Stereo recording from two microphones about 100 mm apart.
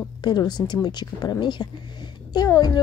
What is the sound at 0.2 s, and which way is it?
A woman's voice, 45° left (ahead or behind).